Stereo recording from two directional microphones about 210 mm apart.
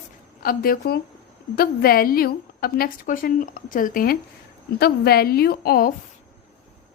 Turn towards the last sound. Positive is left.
turn(degrees=45)  # may be behind; listen again after turning